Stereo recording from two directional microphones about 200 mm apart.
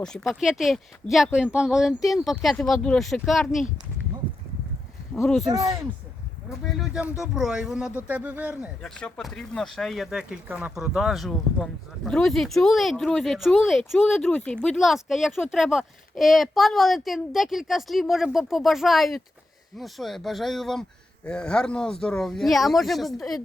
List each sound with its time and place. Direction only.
0.0 s speech: centre (ahead or behind)
5.1 s speech: centre (ahead or behind)
5.5 s speech: 15° right (ahead or behind)
6.7 s speech: centre (ahead or behind)
8.8 s speech: 5° left (ahead or behind)